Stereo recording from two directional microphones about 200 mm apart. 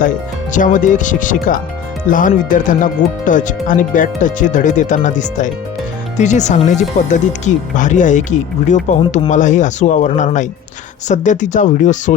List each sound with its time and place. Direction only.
0.5 s speech: 40° left (ahead or behind)
9.0 s speech: 25° left (ahead or behind)
9.3 s speech: 40° left (ahead or behind)